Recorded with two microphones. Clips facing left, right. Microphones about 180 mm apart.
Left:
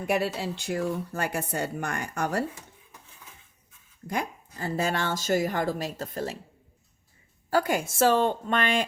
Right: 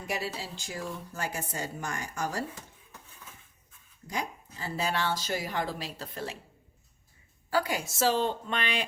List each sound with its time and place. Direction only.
0.1 s speech: 60° left (ahead or behind)
4.0 s speech: 55° left (ahead or behind)
7.5 s speech: 50° left (ahead or behind)